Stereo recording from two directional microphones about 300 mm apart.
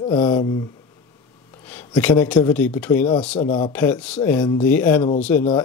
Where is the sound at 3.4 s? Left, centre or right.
Centre.